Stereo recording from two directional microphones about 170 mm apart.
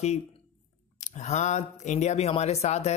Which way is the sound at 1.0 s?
45° left (ahead or behind).